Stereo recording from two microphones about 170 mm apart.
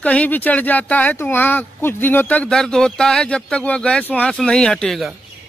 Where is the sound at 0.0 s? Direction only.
10° left (ahead or behind).